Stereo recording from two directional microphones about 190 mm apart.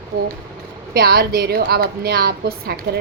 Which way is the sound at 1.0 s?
55° right (ahead or behind).